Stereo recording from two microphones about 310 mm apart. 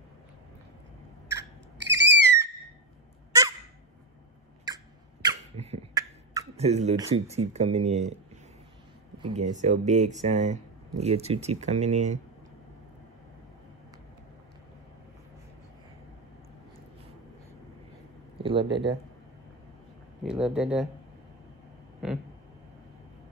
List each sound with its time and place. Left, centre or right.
1.8 s a sound: right
5.2 s beatboxing: centre
9.2 s speech: right
18.4 s speech: centre
20.2 s speech: centre
22.0 s speech: centre